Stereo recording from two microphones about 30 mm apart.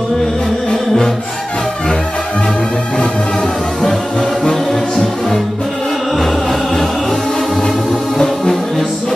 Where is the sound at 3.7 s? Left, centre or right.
Centre.